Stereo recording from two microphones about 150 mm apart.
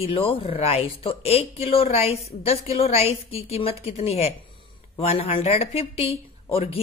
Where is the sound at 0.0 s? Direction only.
40° left (ahead or behind).